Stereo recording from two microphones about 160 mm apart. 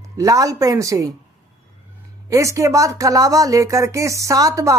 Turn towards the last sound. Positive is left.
turn(degrees=-20)  # may be behind; listen again after turning